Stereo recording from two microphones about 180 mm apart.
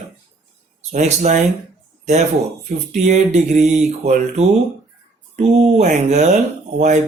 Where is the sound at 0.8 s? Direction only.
40° right (ahead or behind).